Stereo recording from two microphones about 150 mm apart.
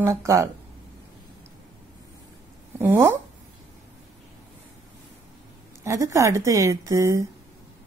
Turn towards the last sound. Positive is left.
turn(degrees=-20)  # may be behind; listen again after turning